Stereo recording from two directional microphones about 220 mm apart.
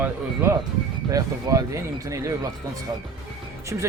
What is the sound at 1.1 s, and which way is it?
Speech, 15° right (ahead or behind).